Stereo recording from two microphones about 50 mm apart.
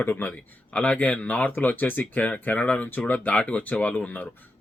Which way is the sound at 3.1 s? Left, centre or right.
Left.